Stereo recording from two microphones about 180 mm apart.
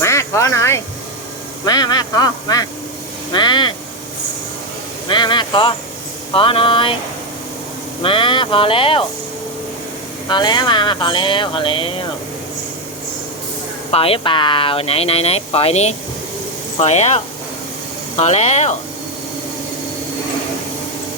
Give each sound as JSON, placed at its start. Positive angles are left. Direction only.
{"t": 0.0, "sound": "music", "side_deg": 15}
{"t": 1.6, "sound": "speech", "side_deg": 25}
{"t": 5.0, "sound": "speech", "side_deg": 25}
{"t": 8.0, "sound": "speech", "side_deg": 30}
{"t": 10.2, "sound": "speech", "side_deg": 25}
{"t": 13.9, "sound": "speech", "side_deg": 30}
{"t": 18.2, "sound": "speech", "side_deg": 40}